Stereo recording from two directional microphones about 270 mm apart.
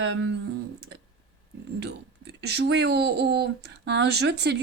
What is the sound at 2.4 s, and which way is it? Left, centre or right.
Speech, right.